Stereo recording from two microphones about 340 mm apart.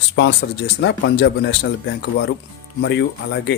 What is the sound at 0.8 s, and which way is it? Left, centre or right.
A man's voice, left.